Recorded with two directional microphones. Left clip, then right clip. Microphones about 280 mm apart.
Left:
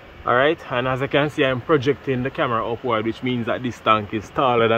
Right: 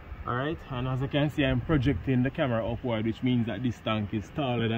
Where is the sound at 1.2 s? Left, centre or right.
Centre.